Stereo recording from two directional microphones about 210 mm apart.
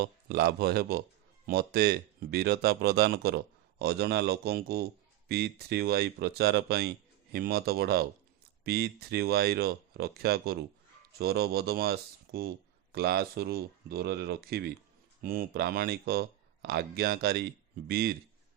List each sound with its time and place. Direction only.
0.0 s speech: 50° right (ahead or behind)